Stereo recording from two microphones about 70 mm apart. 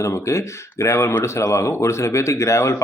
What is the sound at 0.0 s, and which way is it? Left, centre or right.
Speech, left.